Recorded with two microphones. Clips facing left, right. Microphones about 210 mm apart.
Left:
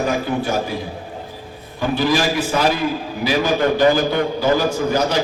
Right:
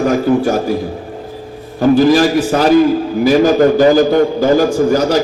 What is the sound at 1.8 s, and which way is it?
A man's voice, 45° right (ahead or behind).